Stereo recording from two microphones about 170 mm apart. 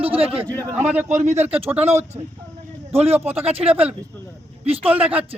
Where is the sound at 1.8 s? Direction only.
40° right (ahead or behind).